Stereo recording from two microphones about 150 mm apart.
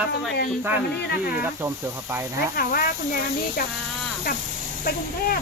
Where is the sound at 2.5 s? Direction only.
80° left.